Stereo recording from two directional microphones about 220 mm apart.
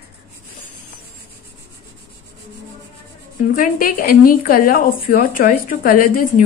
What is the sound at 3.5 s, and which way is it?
A woman's voice, 40° left (ahead or behind).